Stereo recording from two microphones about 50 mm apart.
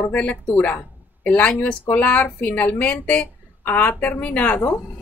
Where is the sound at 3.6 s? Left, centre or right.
Left.